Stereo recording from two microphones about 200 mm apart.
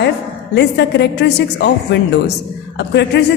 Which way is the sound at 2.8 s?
60° left (ahead or behind).